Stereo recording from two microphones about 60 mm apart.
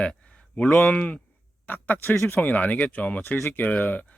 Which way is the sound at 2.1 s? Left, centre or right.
Left.